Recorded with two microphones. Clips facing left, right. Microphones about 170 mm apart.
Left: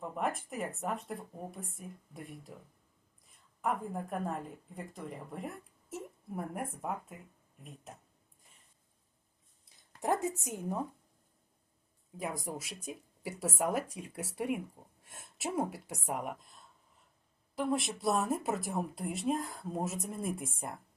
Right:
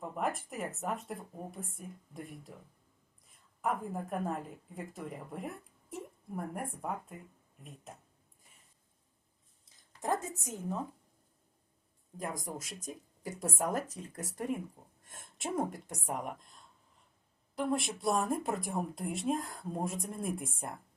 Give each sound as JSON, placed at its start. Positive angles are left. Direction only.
{"t": 0.2, "sound": "a woman's voice", "side_deg": 0}
{"t": 9.6, "sound": "a woman's voice", "side_deg": 20}
{"t": 12.5, "sound": "a woman's voice", "side_deg": 10}